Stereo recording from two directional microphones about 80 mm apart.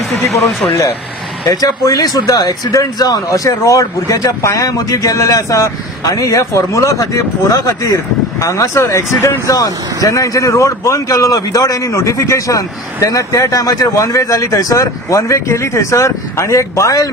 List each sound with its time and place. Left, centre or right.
0.2 s speech: left
1.5 s speech: left